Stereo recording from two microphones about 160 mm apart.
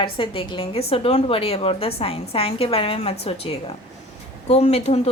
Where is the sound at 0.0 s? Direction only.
30° left (ahead or behind).